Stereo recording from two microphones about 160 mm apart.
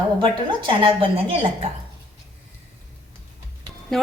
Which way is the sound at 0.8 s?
35° right (ahead or behind).